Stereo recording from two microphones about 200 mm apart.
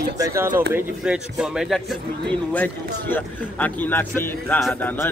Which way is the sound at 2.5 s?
10° left (ahead or behind).